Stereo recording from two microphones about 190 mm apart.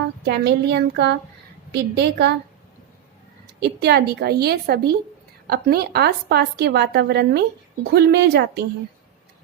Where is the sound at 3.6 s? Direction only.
60° right (ahead or behind).